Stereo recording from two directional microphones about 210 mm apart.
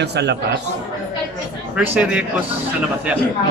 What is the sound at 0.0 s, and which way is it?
Speech, 55° right (ahead or behind).